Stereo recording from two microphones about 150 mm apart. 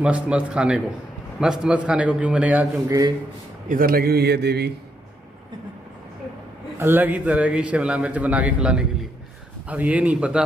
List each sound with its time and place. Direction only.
0.0 s a man's voice: 10° right (ahead or behind)
3.6 s a man's voice: 70° right (ahead or behind); by 4.7 s 90° right
6.8 s a man's voice: 15° right (ahead or behind)